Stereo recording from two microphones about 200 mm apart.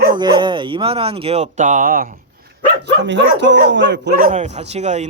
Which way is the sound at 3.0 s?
65° right (ahead or behind).